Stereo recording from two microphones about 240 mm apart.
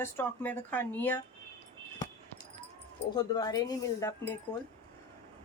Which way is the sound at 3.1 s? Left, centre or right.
Centre.